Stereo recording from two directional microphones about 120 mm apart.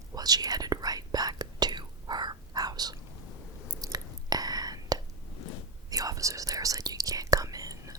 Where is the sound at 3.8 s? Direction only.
35° right (ahead or behind).